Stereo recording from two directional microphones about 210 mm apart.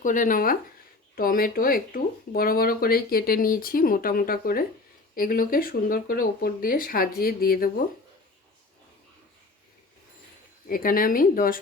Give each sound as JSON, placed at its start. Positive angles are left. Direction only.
{"t": 0.0, "sound": "speech", "side_deg": 40}
{"t": 10.7, "sound": "speech", "side_deg": 40}